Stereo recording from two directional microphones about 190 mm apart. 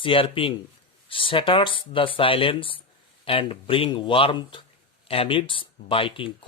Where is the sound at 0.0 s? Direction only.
30° left (ahead or behind).